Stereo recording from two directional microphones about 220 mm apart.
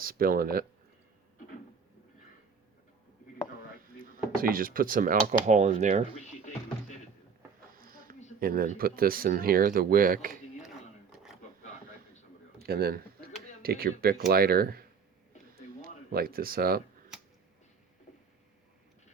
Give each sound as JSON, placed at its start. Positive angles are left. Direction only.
{"t": 0.0, "sound": "speech", "side_deg": -40}
{"t": 4.4, "sound": "speech", "side_deg": -40}
{"t": 6.1, "sound": "music", "side_deg": 35}
{"t": 7.8, "sound": "a sound", "side_deg": -40}
{"t": 8.4, "sound": "speech", "side_deg": -40}
{"t": 12.5, "sound": "speech", "side_deg": -45}
{"t": 15.8, "sound": "speech", "side_deg": -40}